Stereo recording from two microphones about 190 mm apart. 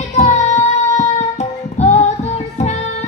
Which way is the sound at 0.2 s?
35° left (ahead or behind).